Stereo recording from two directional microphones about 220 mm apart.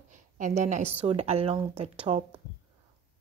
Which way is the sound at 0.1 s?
35° right (ahead or behind).